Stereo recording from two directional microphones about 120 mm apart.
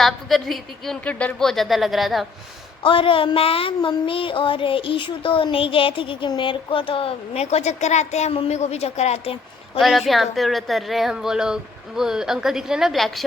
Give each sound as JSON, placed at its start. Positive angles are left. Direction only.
{"t": 0.0, "sound": "speech", "side_deg": 0}
{"t": 2.8, "sound": "child singing", "side_deg": 45}
{"t": 9.7, "sound": "speech", "side_deg": 0}